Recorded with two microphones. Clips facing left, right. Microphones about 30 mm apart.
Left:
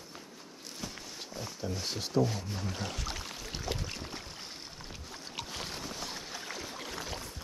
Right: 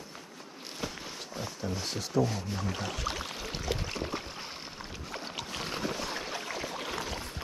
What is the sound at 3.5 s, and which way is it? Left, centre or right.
Boat, centre.